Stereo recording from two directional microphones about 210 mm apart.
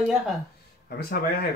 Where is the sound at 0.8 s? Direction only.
45° left (ahead or behind).